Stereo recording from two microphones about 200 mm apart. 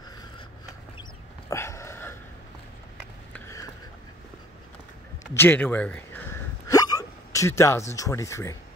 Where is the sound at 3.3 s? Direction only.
15° left (ahead or behind).